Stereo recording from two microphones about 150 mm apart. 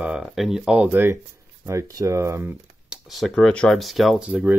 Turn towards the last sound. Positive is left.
turn(degrees=-10)  # may be behind; listen again after turning